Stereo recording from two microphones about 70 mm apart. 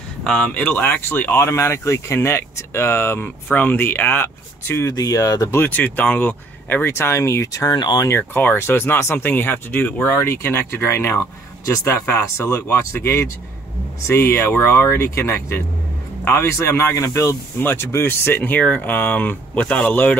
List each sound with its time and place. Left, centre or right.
0.2 s speech: centre; by 4.8 s left
4.9 s speech: left
5.7 s speech: left
6.9 s speech: left
7.7 s speech: left
8.1 s speech: left
17.6 s speech: left